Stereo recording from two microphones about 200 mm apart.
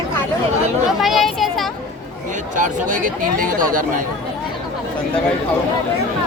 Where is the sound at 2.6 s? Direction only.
45° right (ahead or behind).